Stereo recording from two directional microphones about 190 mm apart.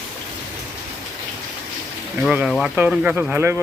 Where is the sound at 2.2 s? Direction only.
5° right (ahead or behind).